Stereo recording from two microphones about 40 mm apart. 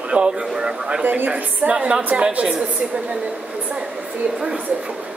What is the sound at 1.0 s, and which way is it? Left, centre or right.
Speech, right.